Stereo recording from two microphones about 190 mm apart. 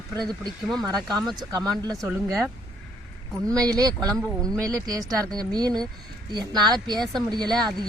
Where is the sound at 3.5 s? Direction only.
20° right (ahead or behind).